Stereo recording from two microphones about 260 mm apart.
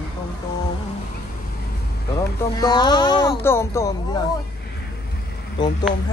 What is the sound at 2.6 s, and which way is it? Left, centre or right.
Speech, centre.